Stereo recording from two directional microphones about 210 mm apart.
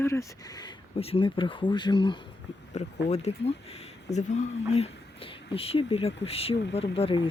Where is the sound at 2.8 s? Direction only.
35° left (ahead or behind).